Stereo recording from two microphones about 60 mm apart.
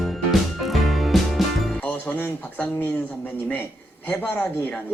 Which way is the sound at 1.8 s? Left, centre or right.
Left.